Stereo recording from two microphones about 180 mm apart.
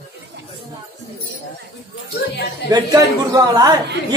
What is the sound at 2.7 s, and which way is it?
A man's voice, 20° right (ahead or behind).